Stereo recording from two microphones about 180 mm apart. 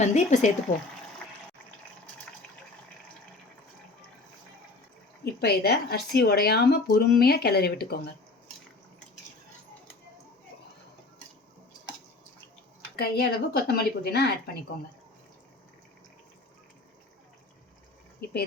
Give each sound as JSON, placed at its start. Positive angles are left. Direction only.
{"t": 0.0, "sound": "speech", "side_deg": 40}
{"t": 5.2, "sound": "speech", "side_deg": 65}
{"t": 13.0, "sound": "speech", "side_deg": 60}